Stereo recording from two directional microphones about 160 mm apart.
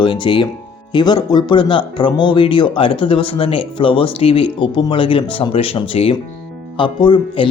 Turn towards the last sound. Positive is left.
turn(degrees=30)  # may be behind; listen again after turning